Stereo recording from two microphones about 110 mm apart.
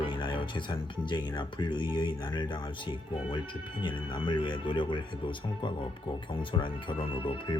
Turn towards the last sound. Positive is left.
turn(degrees=50)  # may be behind; listen again after turning